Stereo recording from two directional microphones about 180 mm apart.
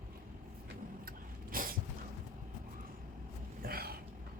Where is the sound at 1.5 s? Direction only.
50° right (ahead or behind).